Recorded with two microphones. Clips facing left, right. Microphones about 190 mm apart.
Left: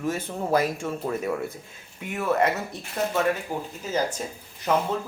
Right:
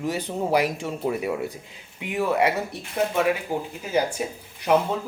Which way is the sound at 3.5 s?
10° right (ahead or behind).